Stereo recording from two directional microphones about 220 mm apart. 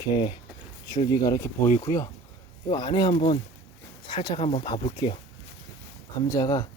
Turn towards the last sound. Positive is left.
turn(degrees=15)  # may be behind; listen again after turning